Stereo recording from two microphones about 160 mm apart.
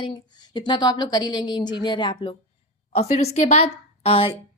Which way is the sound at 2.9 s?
40° left (ahead or behind).